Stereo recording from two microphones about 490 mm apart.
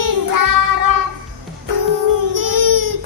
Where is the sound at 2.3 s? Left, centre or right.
Right.